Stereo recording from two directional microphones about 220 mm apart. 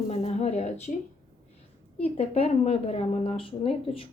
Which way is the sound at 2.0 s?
25° left (ahead or behind).